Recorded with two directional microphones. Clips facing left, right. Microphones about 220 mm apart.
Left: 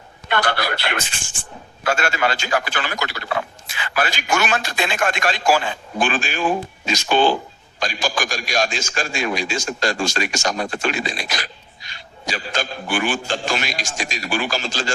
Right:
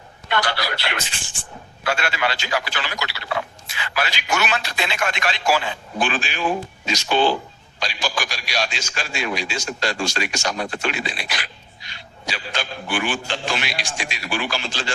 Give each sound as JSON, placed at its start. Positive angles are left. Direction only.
{"t": 0.3, "sound": "a man's voice", "side_deg": 55}